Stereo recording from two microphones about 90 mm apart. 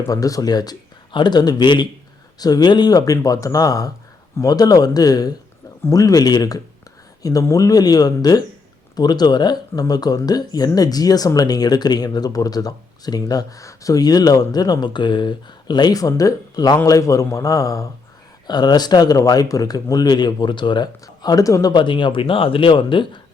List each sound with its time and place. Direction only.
0.1 s a man's voice: 40° left (ahead or behind)
18.4 s speech: 50° left (ahead or behind)
21.7 s speech: 60° left (ahead or behind)